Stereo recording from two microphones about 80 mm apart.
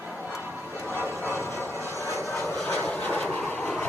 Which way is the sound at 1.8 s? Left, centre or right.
Left.